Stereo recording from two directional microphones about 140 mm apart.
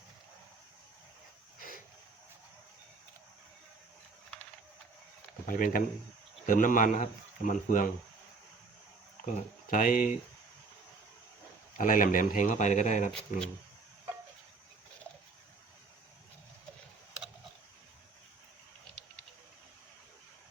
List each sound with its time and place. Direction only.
5.5 s speech: 80° left
9.2 s speech: 70° left (ahead or behind)
11.8 s speech: 70° left (ahead or behind)